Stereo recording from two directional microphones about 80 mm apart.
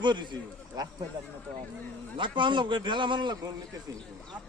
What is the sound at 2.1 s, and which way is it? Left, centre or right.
A man's voice, right.